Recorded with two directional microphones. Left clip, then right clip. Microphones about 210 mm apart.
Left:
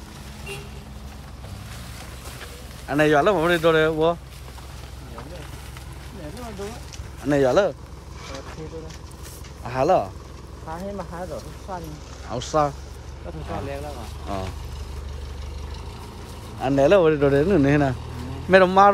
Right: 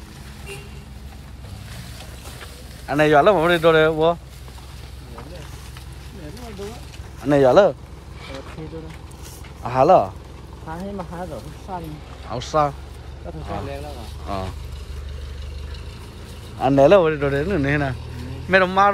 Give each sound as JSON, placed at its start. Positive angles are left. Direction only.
{"t": 2.9, "sound": "speech", "side_deg": 10}
{"t": 7.2, "sound": "speech", "side_deg": 5}
{"t": 9.6, "sound": "speech", "side_deg": 5}
{"t": 10.6, "sound": "speech", "side_deg": -25}
{"t": 12.3, "sound": "speech", "side_deg": 15}
{"t": 13.5, "sound": "speech", "side_deg": 5}
{"t": 16.5, "sound": "speech", "side_deg": 5}